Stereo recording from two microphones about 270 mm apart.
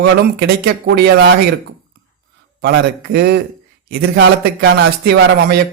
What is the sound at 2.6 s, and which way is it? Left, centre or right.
Speech, right.